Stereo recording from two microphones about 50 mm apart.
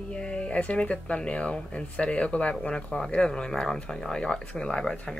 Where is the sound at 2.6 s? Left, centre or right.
Centre.